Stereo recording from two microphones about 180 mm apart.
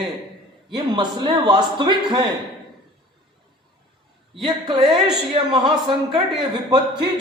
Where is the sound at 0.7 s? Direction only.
25° right (ahead or behind).